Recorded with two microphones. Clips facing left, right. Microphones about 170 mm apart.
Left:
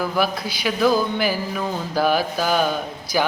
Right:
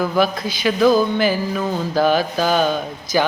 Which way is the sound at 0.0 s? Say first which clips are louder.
Right 4 dB; 10° left (ahead or behind).